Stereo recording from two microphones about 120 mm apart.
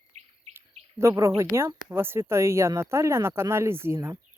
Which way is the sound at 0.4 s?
60° right (ahead or behind).